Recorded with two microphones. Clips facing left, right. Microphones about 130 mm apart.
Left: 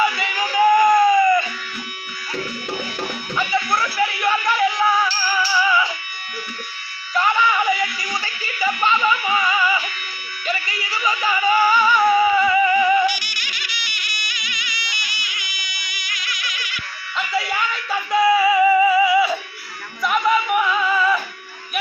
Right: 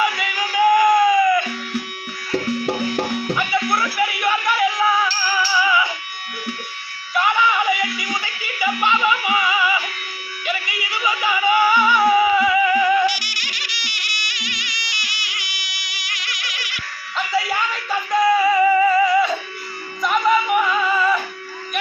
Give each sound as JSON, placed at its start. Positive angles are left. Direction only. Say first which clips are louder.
{"t": 0.0, "sound": "a sound", "louder": "left 1 dB", "side_deg": 0}
{"t": 3.3, "sound": "music", "louder": "left 2 dB", "side_deg": -5}
{"t": 7.1, "sound": "music", "louder": "even", "side_deg": -5}
{"t": 13.1, "sound": "music", "louder": "right 1 dB", "side_deg": -90}
{"t": 17.3, "sound": "music", "louder": "right 2 dB", "side_deg": 5}